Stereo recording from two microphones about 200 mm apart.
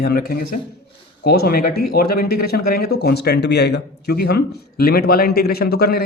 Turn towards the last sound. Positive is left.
turn(degrees=50)  # may be behind; listen again after turning